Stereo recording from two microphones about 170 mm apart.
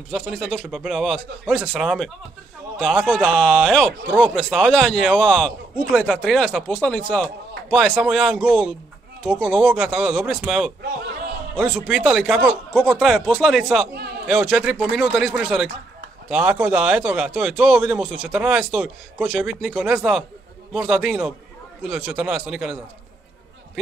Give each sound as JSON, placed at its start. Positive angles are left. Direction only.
{"t": 0.1, "sound": "speech", "side_deg": 0}
{"t": 10.8, "sound": "a man's voice", "side_deg": -70}
{"t": 11.5, "sound": "speech", "side_deg": 0}